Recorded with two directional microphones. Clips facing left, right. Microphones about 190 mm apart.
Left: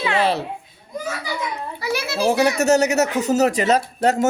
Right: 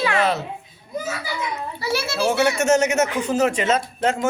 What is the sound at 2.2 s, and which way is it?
Speech, 35° left (ahead or behind).